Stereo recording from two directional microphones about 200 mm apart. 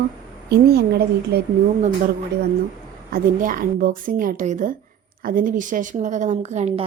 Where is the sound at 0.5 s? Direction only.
55° right (ahead or behind).